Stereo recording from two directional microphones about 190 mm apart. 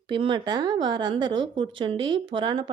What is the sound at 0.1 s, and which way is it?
A woman's voice, 25° right (ahead or behind).